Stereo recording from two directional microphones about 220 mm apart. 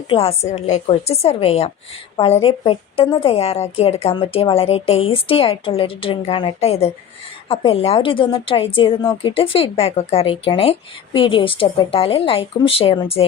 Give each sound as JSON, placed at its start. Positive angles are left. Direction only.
{"t": 0.1, "sound": "a woman's voice", "side_deg": 25}